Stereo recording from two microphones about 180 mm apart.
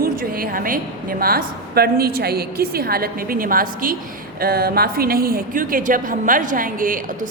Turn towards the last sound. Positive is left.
turn(degrees=-50)  # may be behind; listen again after turning